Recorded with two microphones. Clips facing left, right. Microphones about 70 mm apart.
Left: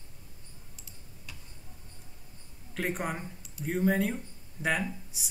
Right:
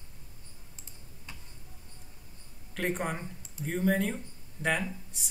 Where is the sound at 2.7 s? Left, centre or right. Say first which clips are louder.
Right 1 dB; centre.